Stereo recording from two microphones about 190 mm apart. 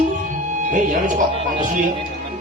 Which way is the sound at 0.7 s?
45° right (ahead or behind).